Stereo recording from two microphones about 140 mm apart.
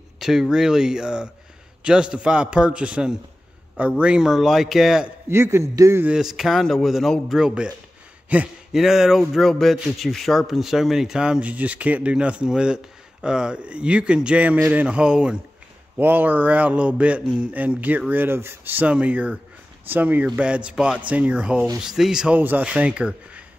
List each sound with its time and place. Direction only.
0.2 s speech: 5° right (ahead or behind)
5.3 s a man's voice: 20° right (ahead or behind)
6.0 s speech: 5° right (ahead or behind)